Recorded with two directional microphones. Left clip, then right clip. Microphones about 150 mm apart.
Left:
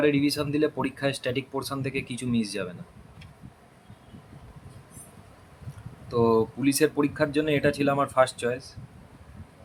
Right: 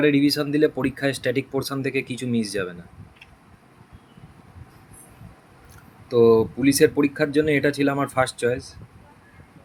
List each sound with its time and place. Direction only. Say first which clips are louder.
0.0 s speech: right 4 dB; 20° right (ahead or behind)
6.1 s speech: right 7 dB; 15° right (ahead or behind)